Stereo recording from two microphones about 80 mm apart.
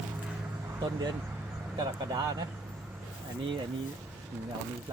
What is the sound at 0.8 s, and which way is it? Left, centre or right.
Speech, right.